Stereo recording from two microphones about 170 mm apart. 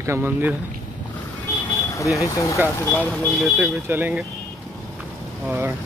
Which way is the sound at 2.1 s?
20° left (ahead or behind).